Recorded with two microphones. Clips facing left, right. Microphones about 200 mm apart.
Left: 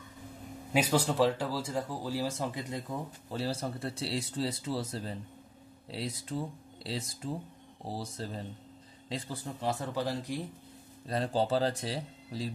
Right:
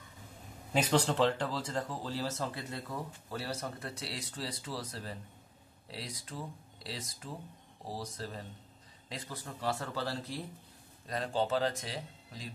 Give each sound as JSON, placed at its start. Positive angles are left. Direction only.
{"t": 0.7, "sound": "speech", "side_deg": 10}
{"t": 11.1, "sound": "speech", "side_deg": 30}